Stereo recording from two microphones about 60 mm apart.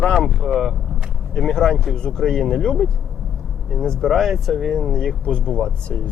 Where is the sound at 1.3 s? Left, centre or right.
Centre.